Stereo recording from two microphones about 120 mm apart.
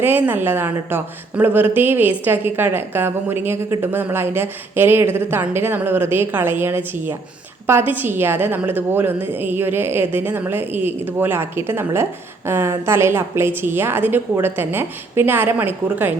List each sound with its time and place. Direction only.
0.0 s a woman's voice: 15° right (ahead or behind)